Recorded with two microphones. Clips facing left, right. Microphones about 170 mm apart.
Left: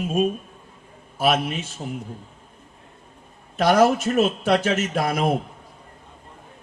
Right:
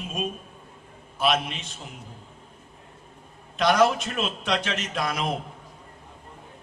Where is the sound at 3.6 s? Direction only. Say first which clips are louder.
Left 3 dB; 45° left (ahead or behind).